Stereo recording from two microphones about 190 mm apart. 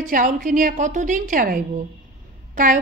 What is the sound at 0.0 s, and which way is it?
A woman's voice, 45° right (ahead or behind).